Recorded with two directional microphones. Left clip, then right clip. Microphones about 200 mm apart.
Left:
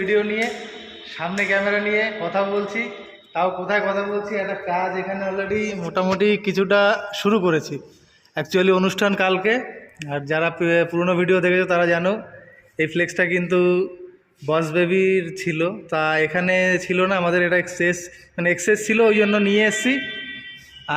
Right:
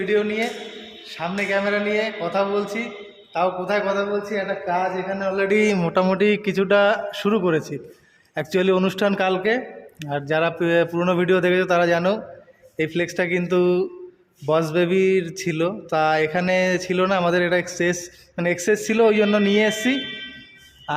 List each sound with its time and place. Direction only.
0.0 s speech: 10° right (ahead or behind)
5.5 s a man's voice: 55° right (ahead or behind)
5.9 s speech: 20° right (ahead or behind)
6.1 s a sound: 5° right (ahead or behind)